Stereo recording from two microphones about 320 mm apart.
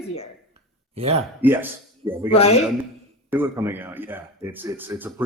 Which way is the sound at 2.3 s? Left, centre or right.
Centre.